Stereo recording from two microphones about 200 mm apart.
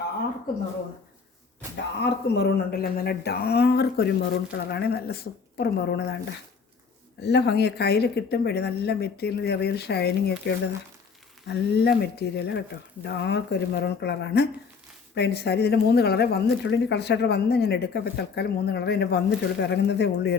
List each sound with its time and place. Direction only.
1.7 s speech: 60° left (ahead or behind)
7.2 s speech: 60° left (ahead or behind)